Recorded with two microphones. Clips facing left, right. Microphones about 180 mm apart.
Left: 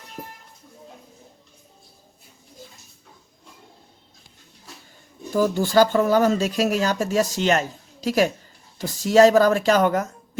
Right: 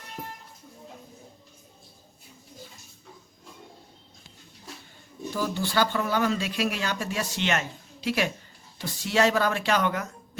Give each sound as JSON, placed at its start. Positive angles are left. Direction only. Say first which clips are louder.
{"t": 5.3, "sound": "speech", "louder": "left 9 dB", "side_deg": 45}